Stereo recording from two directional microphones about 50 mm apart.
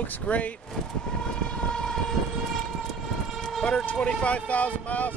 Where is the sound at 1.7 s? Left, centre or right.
Centre.